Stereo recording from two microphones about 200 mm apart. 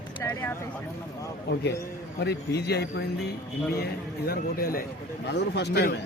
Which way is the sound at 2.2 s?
55° left (ahead or behind).